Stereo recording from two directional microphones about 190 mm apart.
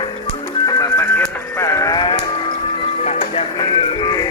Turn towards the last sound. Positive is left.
turn(degrees=25)  # may be behind; listen again after turning